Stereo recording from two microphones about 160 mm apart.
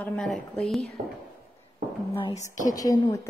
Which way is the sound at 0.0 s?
5° left (ahead or behind).